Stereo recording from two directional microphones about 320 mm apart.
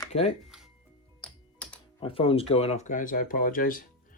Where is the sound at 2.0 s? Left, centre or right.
Centre.